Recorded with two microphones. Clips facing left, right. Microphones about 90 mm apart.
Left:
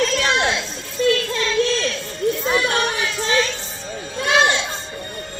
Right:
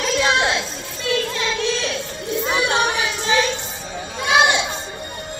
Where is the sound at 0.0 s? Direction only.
10° right (ahead or behind).